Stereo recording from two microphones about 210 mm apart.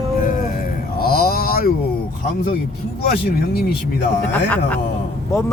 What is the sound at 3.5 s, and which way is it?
Speech, 50° left (ahead or behind).